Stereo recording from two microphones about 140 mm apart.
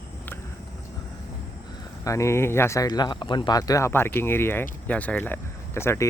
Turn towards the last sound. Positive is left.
turn(degrees=20)  # may be behind; listen again after turning